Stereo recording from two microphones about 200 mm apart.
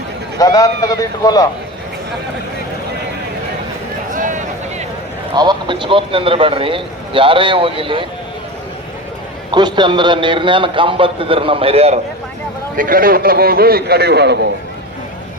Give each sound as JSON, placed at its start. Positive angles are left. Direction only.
{"t": 0.3, "sound": "speech", "side_deg": 15}
{"t": 4.1, "sound": "a sound", "side_deg": -40}
{"t": 5.3, "sound": "speech", "side_deg": -20}
{"t": 9.5, "sound": "speech", "side_deg": -20}
{"t": 12.7, "sound": "a man's voice", "side_deg": -45}